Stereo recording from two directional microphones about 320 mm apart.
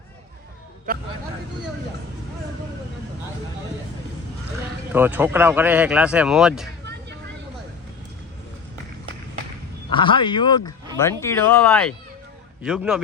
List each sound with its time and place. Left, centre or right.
0.9 s speech: right
4.9 s speech: centre
9.9 s speech: centre